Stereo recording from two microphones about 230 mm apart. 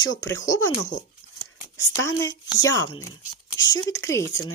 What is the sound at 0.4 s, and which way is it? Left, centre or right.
Speech, centre.